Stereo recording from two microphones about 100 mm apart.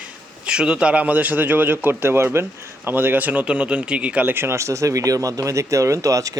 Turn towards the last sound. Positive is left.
turn(degrees=-35)  # may be behind; listen again after turning